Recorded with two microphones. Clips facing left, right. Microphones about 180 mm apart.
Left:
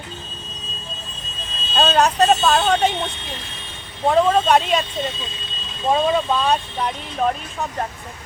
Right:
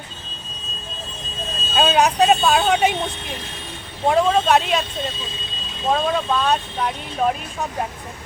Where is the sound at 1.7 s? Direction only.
10° right (ahead or behind).